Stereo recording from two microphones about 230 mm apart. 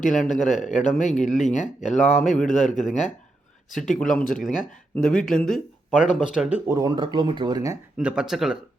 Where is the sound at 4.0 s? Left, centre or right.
Centre.